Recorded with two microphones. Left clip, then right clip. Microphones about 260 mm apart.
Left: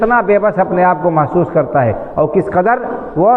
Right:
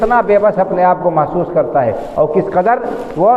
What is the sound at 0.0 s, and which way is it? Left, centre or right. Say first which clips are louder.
A man's voice: right 1 dB; left.